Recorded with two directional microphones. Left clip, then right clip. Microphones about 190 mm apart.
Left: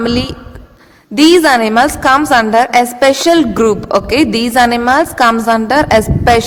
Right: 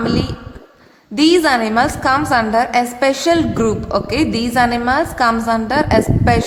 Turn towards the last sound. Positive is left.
turn(degrees=45)  # may be behind; listen again after turning